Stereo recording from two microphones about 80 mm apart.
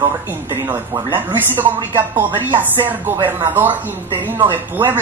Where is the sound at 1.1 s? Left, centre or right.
Right.